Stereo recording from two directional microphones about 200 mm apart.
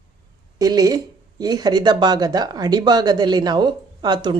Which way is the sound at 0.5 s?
20° right (ahead or behind).